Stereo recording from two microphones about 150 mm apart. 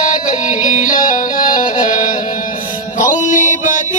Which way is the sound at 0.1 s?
55° left (ahead or behind).